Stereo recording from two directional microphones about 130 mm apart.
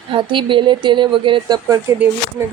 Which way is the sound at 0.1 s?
40° right (ahead or behind).